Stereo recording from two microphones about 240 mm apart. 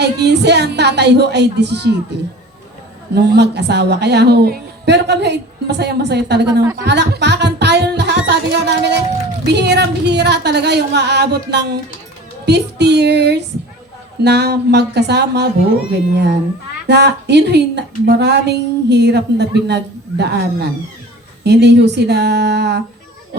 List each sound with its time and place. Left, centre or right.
0.0 s a woman's voice: right
3.2 s a woman's voice: right
6.5 s speech: centre
6.7 s a sound: right
9.4 s a woman's voice: right